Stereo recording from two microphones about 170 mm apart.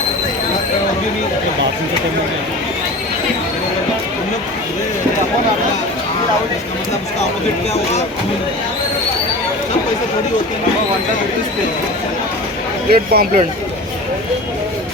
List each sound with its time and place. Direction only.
12.9 s a man's voice: 65° right (ahead or behind)